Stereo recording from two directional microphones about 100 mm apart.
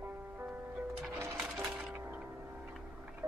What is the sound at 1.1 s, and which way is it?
Music, 25° right (ahead or behind).